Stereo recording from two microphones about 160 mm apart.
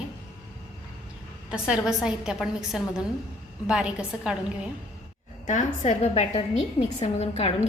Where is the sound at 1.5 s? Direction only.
5° right (ahead or behind).